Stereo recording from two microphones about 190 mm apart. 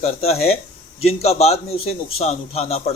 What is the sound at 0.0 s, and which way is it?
Speech, 35° left (ahead or behind).